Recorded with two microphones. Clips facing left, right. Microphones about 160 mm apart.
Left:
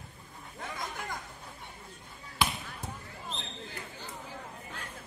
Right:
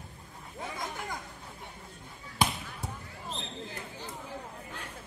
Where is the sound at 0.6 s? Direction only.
Centre (ahead or behind).